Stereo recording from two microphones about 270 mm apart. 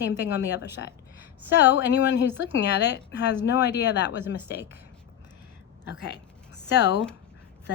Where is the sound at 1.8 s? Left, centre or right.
Left.